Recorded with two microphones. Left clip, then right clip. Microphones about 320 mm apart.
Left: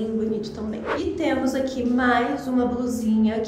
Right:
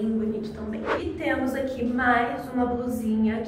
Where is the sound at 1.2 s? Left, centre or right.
Left.